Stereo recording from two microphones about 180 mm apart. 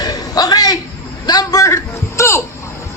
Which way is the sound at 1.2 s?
20° left (ahead or behind).